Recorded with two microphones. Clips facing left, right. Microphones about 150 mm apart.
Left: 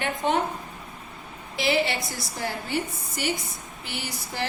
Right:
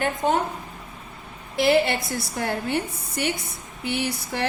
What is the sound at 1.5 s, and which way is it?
A woman's voice, 55° right (ahead or behind).